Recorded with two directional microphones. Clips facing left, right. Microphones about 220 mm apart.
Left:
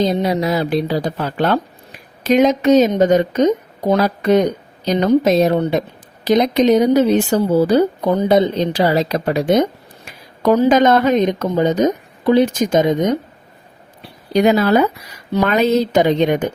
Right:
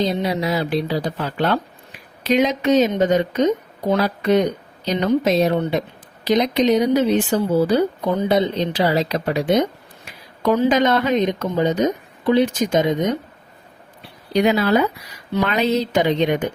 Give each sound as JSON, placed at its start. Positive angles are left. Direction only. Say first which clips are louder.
{"t": 0.0, "sound": "a woman's voice", "louder": "left 4 dB", "side_deg": 45}
{"t": 14.3, "sound": "a woman's voice", "louder": "left 4 dB", "side_deg": 45}